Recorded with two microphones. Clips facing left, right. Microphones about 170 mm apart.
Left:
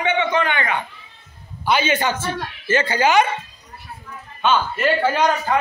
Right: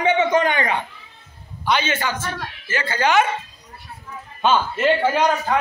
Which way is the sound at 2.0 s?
25° left (ahead or behind).